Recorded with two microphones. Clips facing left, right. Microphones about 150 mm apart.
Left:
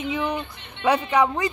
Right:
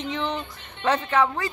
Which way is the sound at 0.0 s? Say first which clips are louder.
Left 2 dB; 10° left (ahead or behind).